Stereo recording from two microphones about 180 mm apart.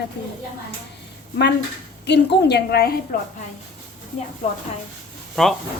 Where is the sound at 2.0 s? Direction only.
70° left (ahead or behind).